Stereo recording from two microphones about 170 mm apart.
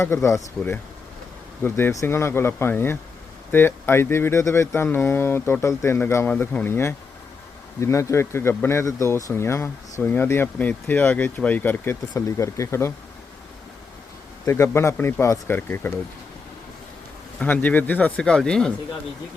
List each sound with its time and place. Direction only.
0.0 s speech: 15° left (ahead or behind)
14.4 s speech: 15° left (ahead or behind)
17.4 s speech: 10° left (ahead or behind)